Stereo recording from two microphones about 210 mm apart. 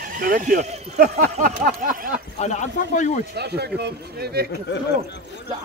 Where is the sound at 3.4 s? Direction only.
50° right (ahead or behind).